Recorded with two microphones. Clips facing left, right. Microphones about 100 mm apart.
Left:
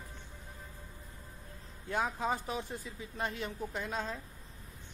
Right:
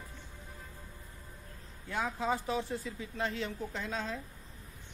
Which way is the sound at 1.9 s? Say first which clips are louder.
Even; 15° left (ahead or behind).